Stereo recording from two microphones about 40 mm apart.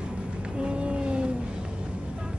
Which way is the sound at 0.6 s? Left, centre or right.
Right.